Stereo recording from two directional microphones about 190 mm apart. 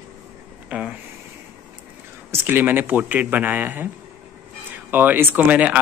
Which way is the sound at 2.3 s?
10° right (ahead or behind).